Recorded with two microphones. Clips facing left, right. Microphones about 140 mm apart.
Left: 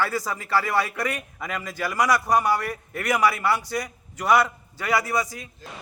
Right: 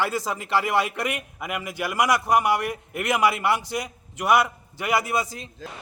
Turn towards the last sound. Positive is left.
turn(degrees=-25)  # may be behind; listen again after turning